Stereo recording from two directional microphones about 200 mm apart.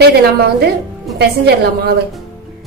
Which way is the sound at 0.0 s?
55° right (ahead or behind).